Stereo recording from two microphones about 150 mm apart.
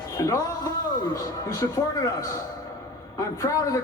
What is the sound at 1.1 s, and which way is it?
A man's voice, 20° left (ahead or behind).